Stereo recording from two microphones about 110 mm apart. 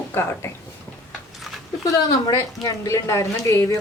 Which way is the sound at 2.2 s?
30° left (ahead or behind).